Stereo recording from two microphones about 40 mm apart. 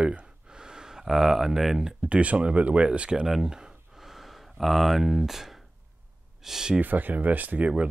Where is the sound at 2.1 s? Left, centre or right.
Right.